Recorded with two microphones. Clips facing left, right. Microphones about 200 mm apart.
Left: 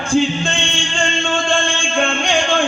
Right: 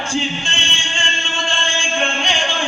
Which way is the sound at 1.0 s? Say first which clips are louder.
Left 8 dB; 50° left (ahead or behind).